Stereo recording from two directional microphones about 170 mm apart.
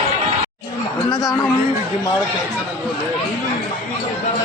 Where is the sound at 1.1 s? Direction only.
20° left (ahead or behind).